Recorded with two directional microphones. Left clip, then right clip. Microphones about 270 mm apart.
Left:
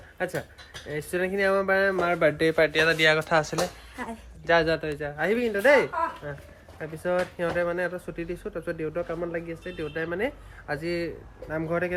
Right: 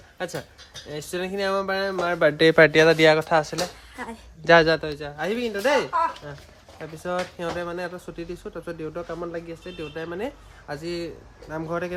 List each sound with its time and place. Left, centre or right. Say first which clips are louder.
0.9 s speech: left 2 dB; centre
2.4 s speech: right 7 dB; right
2.7 s speech: right 5 dB; centre
4.4 s speech: right 6 dB; right
4.8 s speech: left 1 dB; centre